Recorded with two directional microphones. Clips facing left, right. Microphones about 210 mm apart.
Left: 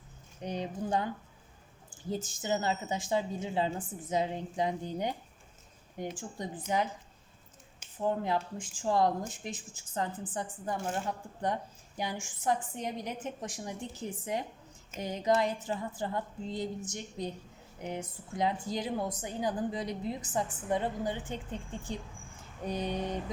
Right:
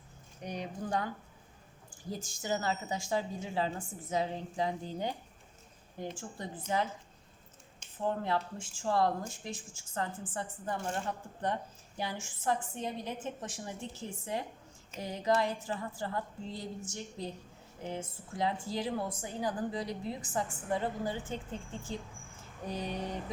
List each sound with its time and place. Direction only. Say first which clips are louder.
0.4 s a woman's voice: left 3 dB; 20° left (ahead or behind)
2.1 s a woman's voice: left 3 dB; 20° left (ahead or behind)
22.6 s a woman's voice: left 4 dB; 20° left (ahead or behind)